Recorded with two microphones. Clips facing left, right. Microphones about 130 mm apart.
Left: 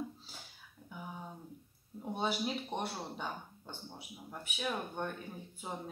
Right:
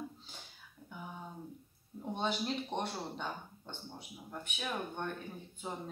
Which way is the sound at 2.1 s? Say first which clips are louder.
Even; 10° left (ahead or behind).